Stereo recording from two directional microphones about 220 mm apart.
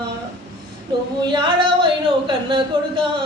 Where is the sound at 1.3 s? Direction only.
20° right (ahead or behind).